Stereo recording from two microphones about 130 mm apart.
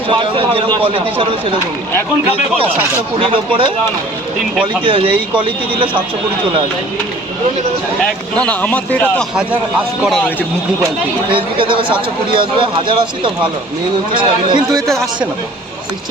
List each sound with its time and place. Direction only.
0.1 s speech: 40° right (ahead or behind)
3.2 s speech: 40° right (ahead or behind)
4.8 s speech: 40° right (ahead or behind)
8.0 s speech: 10° left (ahead or behind)
10.0 s speech: centre (ahead or behind)
11.3 s speech: 40° right (ahead or behind)
14.7 s speech: 5° left (ahead or behind)